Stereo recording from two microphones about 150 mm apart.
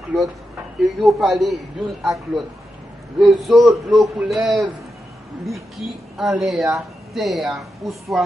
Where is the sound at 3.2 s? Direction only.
Centre (ahead or behind).